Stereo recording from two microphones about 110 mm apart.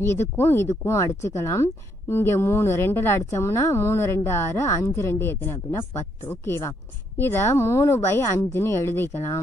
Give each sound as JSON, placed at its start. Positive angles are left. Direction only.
{"t": 0.0, "sound": "a woman's voice", "side_deg": 25}